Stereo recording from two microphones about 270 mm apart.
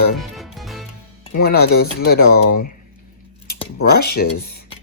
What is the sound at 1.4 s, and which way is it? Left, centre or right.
Speech, left.